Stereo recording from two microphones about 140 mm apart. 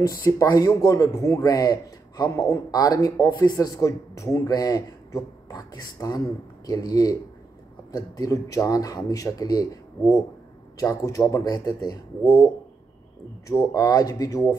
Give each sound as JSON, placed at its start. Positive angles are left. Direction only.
{"t": 0.0, "sound": "speech", "side_deg": 25}
{"t": 12.2, "sound": "speech", "side_deg": 15}
{"t": 13.5, "sound": "speech", "side_deg": 25}